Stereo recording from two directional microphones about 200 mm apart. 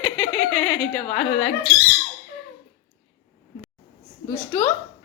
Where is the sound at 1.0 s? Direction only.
30° left (ahead or behind).